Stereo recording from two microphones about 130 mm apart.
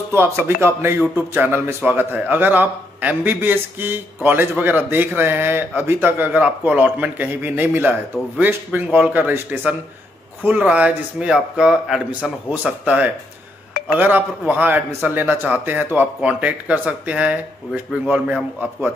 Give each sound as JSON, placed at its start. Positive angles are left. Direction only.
{"t": 0.1, "sound": "a man's voice", "side_deg": -20}